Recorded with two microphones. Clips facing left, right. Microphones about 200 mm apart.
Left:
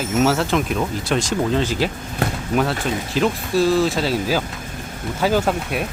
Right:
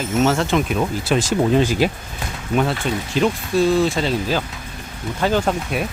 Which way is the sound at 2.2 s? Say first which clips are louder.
Left 8 dB; 65° left (ahead or behind).